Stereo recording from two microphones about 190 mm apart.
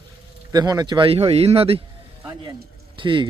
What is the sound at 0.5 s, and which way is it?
Speech, 20° right (ahead or behind).